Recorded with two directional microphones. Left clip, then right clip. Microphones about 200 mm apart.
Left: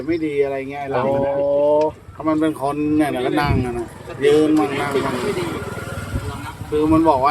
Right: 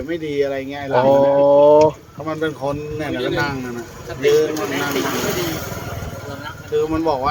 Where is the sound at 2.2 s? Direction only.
5° left (ahead or behind).